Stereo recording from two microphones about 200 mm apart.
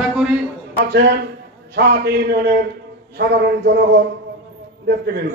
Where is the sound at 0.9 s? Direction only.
55° right (ahead or behind).